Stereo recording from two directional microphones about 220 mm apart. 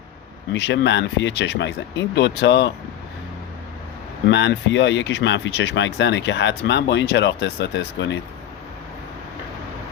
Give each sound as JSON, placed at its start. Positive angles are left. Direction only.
{"t": 0.5, "sound": "speech", "side_deg": 55}
{"t": 4.3, "sound": "speech", "side_deg": 55}